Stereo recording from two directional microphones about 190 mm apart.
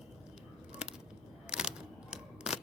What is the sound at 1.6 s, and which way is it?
Typewriter, 5° right (ahead or behind).